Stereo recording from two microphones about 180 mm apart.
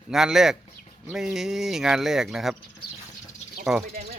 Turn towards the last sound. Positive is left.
turn(degrees=0)  # may be behind; listen again after turning